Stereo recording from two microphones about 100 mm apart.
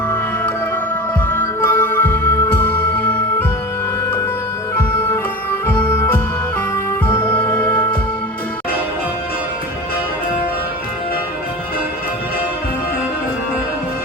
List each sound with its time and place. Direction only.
1.3 s music: 20° left (ahead or behind)
4.7 s music: 25° left (ahead or behind)